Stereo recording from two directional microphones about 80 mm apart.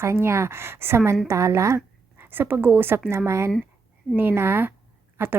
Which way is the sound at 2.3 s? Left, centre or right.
Right.